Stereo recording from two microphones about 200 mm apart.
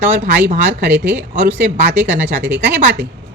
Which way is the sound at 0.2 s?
50° right (ahead or behind).